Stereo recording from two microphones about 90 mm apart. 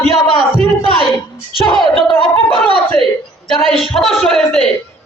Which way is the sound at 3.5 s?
5° left (ahead or behind).